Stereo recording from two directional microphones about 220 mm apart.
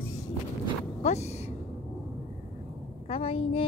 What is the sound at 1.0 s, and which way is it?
Speech, 30° left (ahead or behind).